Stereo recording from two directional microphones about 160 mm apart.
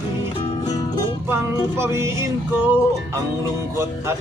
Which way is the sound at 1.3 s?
15° right (ahead or behind).